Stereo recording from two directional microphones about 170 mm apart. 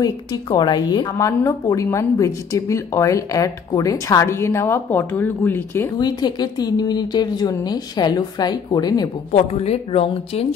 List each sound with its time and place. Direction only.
0.0 s a woman's voice: 25° left (ahead or behind)
5.9 s a woman's voice: 25° left (ahead or behind)
9.3 s speech: 40° left (ahead or behind)